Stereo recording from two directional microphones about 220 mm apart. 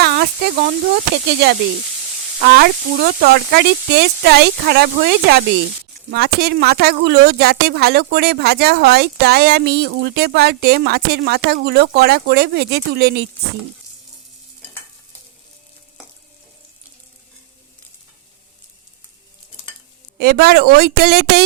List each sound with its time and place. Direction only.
0.0 s a sound: 45° right (ahead or behind)
1.1 s a woman's voice: 50° right (ahead or behind)
20.1 s a woman's voice: 45° right (ahead or behind)